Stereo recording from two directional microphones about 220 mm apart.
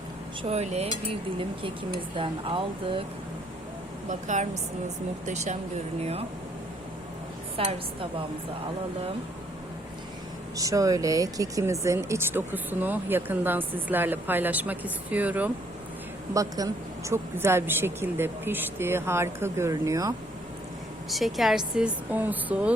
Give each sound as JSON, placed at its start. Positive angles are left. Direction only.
{"t": 0.4, "sound": "dishes", "side_deg": -30}
{"t": 1.4, "sound": "speech", "side_deg": -25}
{"t": 4.1, "sound": "dishes", "side_deg": -35}
{"t": 6.0, "sound": "speech", "side_deg": -30}
{"t": 7.5, "sound": "a woman's voice", "side_deg": -25}
{"t": 10.6, "sound": "speech", "side_deg": -15}
{"t": 21.1, "sound": "speech", "side_deg": 0}